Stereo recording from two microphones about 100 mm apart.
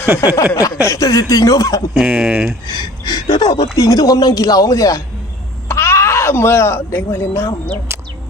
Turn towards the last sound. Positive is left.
turn(degrees=25)  # may be behind; listen again after turning